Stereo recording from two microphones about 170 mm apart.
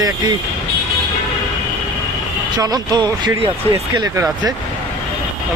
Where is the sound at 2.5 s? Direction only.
20° right (ahead or behind).